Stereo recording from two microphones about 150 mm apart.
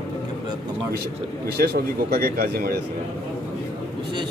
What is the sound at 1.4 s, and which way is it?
A man's voice, 90° right.